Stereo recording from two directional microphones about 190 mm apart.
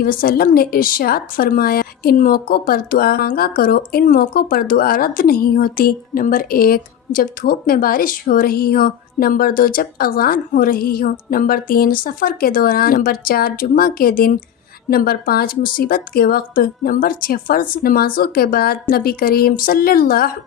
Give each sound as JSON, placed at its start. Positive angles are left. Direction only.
{"t": 0.0, "sound": "a woman's voice", "side_deg": 50}